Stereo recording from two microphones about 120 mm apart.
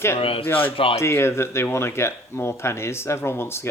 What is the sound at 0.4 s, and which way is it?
Speech, 15° left (ahead or behind).